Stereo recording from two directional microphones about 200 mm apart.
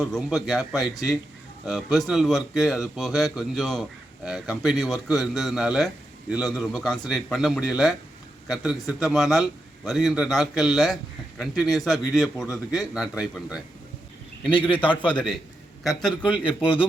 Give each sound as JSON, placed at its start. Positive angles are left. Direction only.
{"t": 0.0, "sound": "speech", "side_deg": 0}
{"t": 14.7, "sound": "a man's voice", "side_deg": 25}
{"t": 15.0, "sound": "speech", "side_deg": 5}
{"t": 16.2, "sound": "a man's voice", "side_deg": 25}